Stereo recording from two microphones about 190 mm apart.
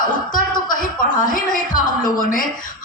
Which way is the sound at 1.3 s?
45° left (ahead or behind).